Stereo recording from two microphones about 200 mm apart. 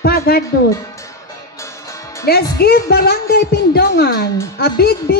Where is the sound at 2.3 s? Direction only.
50° left (ahead or behind).